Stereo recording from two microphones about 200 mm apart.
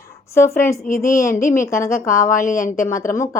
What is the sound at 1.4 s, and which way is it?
Speech, 40° left (ahead or behind).